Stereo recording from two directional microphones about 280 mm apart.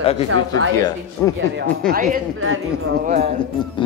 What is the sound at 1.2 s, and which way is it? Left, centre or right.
Speech, centre.